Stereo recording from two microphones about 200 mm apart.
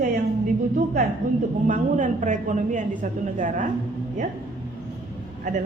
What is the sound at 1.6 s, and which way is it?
A woman's voice, 40° right (ahead or behind).